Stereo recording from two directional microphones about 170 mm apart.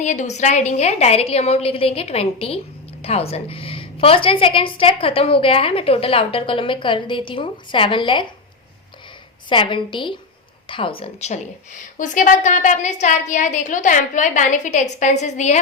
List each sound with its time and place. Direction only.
0.0 s a woman's voice: 45° left (ahead or behind); by 8.3 s 30° left (ahead or behind)
9.5 s a woman's voice: 30° left (ahead or behind)